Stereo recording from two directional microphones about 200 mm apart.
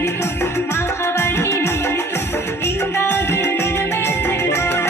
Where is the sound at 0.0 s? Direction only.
15° left (ahead or behind).